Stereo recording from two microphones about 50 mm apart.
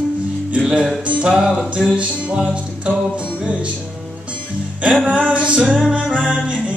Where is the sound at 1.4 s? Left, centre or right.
Centre.